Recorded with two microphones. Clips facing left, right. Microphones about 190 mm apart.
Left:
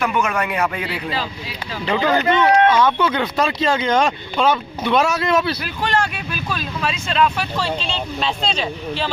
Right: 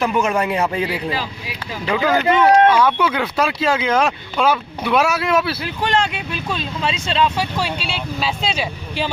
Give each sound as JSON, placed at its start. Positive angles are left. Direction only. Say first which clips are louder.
{"t": 0.0, "sound": "speech", "louder": "right 2 dB", "side_deg": -30}
{"t": 0.9, "sound": "speech", "louder": "right 2 dB", "side_deg": -10}
{"t": 5.5, "sound": "speech", "louder": "right 1 dB", "side_deg": -20}
{"t": 7.3, "sound": "speech", "louder": "right 1 dB", "side_deg": -10}